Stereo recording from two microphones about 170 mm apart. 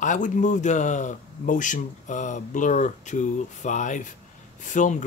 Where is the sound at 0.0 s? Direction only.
50° left (ahead or behind).